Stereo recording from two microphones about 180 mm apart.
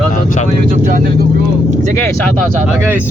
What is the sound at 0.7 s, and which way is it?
Speech, 45° right (ahead or behind).